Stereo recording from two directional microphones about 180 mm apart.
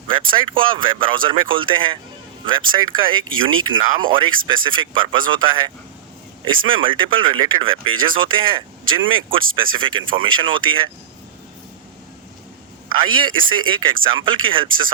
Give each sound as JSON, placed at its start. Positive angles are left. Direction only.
{"t": 0.1, "sound": "speech", "side_deg": -30}
{"t": 12.9, "sound": "speech", "side_deg": -25}